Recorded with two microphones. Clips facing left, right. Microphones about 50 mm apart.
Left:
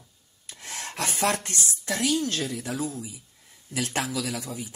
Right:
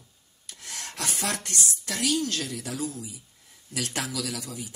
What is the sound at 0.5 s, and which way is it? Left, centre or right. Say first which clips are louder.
Speech: left 3 dB; left.